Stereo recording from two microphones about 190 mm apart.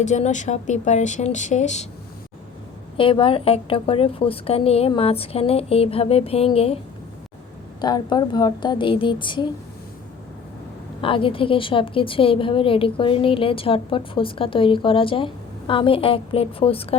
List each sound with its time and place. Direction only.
0.0 s a woman's voice: 40° left (ahead or behind)
3.0 s a woman's voice: 25° left (ahead or behind)
7.8 s a woman's voice: 20° left (ahead or behind)
11.0 s a woman's voice: 30° left (ahead or behind)